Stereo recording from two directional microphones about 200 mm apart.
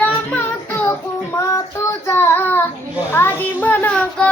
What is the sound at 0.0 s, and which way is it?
Child singing, 10° left (ahead or behind).